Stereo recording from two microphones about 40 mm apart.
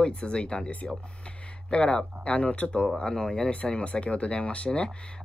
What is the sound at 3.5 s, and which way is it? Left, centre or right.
Speech, left.